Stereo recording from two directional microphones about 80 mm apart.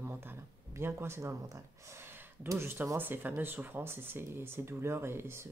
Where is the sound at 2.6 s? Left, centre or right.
Right.